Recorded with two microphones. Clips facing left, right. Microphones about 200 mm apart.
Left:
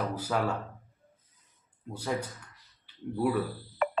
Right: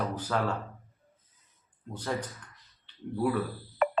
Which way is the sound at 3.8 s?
50° right (ahead or behind).